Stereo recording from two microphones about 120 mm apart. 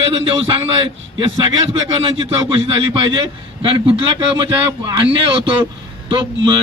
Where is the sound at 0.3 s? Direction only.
50° right (ahead or behind).